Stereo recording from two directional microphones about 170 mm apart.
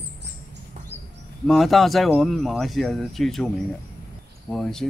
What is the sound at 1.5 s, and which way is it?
Speech, centre (ahead or behind).